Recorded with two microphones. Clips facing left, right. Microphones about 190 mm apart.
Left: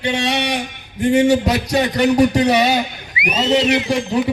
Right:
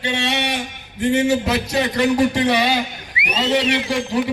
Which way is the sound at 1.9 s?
20° left (ahead or behind).